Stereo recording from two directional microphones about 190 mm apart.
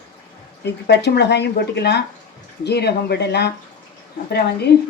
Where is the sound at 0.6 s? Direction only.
60° left (ahead or behind).